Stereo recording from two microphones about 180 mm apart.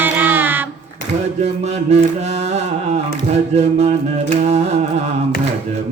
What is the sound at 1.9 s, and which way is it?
Mantra, 35° right (ahead or behind).